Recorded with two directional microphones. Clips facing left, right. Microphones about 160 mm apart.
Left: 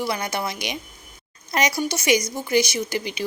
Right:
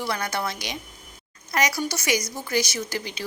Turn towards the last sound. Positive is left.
turn(degrees=15)  # may be behind; listen again after turning